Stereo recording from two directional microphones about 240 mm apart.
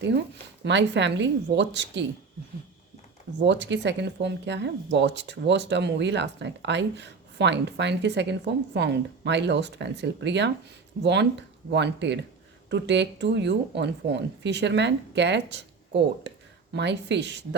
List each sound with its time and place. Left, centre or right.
0.6 s speech: right
3.4 s speech: right